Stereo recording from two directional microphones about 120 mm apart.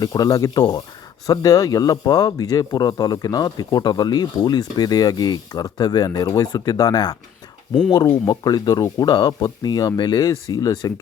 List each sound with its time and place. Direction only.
0.0 s speech: 30° left (ahead or behind)